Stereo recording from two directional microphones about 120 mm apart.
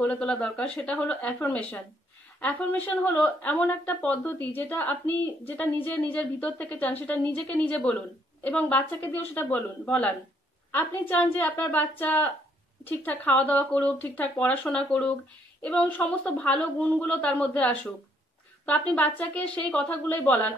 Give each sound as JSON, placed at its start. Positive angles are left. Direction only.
{"t": 0.0, "sound": "speech", "side_deg": 10}